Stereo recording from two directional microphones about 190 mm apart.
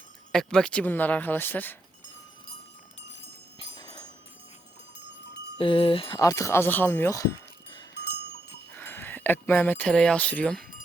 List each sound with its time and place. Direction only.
0.3 s speech: 5° left (ahead or behind)
3.6 s a sound: 20° left (ahead or behind)
5.5 s speech: 30° left (ahead or behind)
7.9 s livestock: 60° left (ahead or behind)
8.7 s speech: 10° left (ahead or behind)